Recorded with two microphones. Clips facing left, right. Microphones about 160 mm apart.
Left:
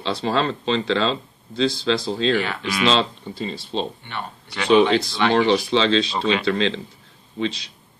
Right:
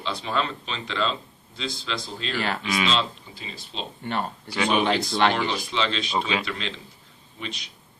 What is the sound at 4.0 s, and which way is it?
Speech, 40° right (ahead or behind).